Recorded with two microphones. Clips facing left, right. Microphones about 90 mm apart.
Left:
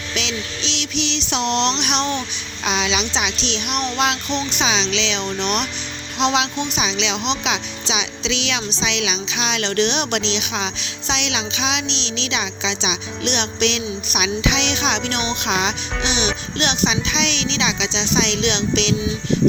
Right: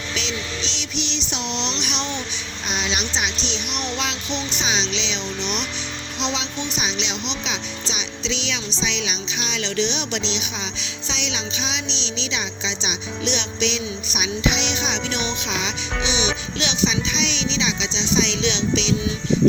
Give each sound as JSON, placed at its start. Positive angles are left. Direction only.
{"t": 0.1, "sound": "a sound", "side_deg": 75}
{"t": 2.6, "sound": "a woman's voice", "side_deg": 90}
{"t": 3.8, "sound": "child singing", "side_deg": 55}
{"t": 4.5, "sound": "a woman's voice", "side_deg": 90}
{"t": 15.4, "sound": "speech", "side_deg": 60}